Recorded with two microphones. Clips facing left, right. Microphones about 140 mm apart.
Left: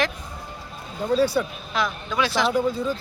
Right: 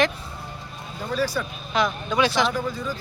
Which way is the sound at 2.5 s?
25° left (ahead or behind).